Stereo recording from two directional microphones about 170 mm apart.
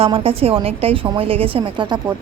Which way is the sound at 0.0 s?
35° right (ahead or behind).